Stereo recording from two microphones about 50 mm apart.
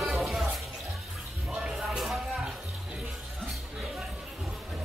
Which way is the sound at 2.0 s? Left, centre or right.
Centre.